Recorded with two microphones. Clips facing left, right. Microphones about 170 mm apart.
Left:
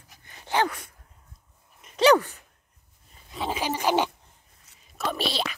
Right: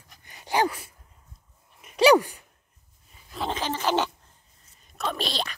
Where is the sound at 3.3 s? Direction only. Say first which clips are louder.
Left 1 dB; 5° left (ahead or behind).